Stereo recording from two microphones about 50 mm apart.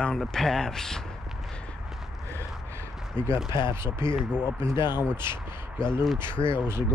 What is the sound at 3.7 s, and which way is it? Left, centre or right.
Speech, right.